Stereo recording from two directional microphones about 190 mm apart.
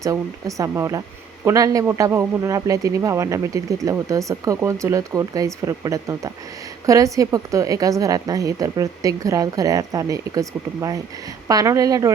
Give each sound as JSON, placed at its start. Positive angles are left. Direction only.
{"t": 0.0, "sound": "a woman's voice", "side_deg": -15}